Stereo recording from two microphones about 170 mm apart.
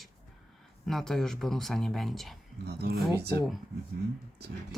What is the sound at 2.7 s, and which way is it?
Speech, 70° right (ahead or behind).